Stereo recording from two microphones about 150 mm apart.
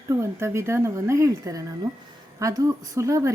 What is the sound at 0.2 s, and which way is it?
A woman's voice, 20° right (ahead or behind).